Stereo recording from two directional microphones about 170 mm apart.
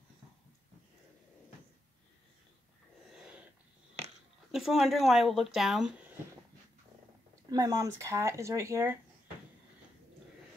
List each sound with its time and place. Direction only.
3.1 s snort: 5° right (ahead or behind)
4.5 s speech: centre (ahead or behind)
7.5 s speech: 20° right (ahead or behind)